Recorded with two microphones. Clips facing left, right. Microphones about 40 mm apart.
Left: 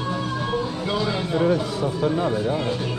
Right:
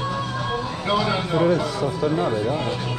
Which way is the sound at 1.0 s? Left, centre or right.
Right.